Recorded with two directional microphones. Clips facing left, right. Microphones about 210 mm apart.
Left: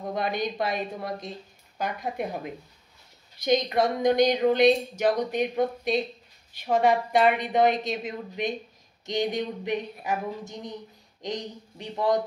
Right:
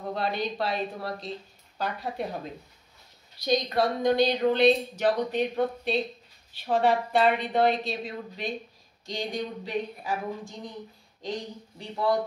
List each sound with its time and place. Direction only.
0.1 s a woman's voice: 15° left (ahead or behind)